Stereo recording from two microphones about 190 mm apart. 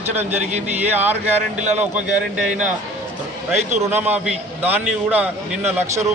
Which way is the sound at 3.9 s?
10° right (ahead or behind).